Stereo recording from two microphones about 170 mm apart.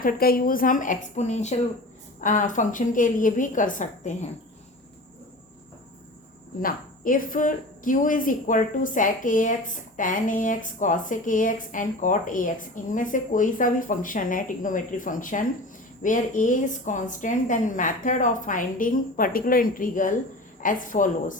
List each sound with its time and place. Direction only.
0.0 s speech: 60° left (ahead or behind)
6.6 s speech: 55° left (ahead or behind)